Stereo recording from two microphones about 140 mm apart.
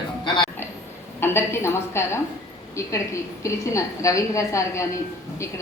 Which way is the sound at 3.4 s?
20° left (ahead or behind).